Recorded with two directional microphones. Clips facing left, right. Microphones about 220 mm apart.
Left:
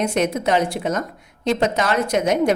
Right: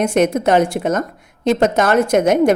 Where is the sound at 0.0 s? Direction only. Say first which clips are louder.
Right 5 dB; 50° right (ahead or behind).